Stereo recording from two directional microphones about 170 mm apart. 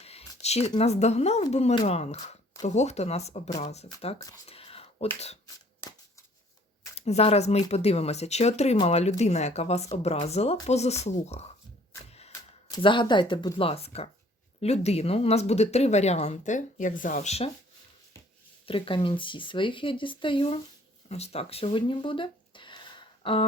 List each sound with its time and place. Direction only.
0.0 s a sound: 35° left (ahead or behind)
0.8 s speech: 40° left (ahead or behind)
4.4 s a sound: 35° left (ahead or behind)
6.9 s speech: 40° left (ahead or behind)
12.7 s speech: 30° left (ahead or behind)
18.6 s speech: 30° left (ahead or behind)